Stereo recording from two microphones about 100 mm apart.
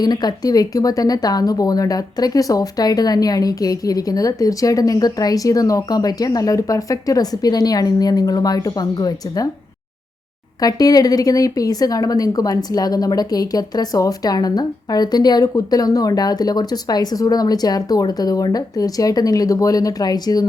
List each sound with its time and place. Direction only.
0.0 s speech: 45° left (ahead or behind)
10.6 s speech: 40° left (ahead or behind)